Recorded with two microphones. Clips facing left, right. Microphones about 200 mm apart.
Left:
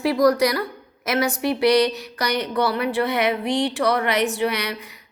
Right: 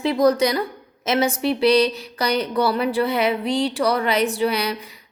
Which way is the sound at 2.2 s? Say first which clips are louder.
Right 2 dB; 35° right (ahead or behind).